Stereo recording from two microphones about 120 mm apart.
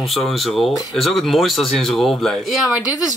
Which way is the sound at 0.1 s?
Centre (ahead or behind).